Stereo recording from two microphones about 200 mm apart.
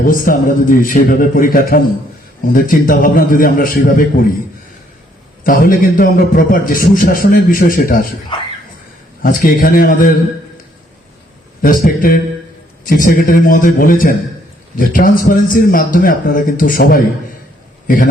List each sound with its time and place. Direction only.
0.0 s a man's voice: 45° left (ahead or behind)
5.5 s a man's voice: 45° left (ahead or behind)
9.2 s a man's voice: 45° left (ahead or behind)
11.6 s a man's voice: 45° left (ahead or behind)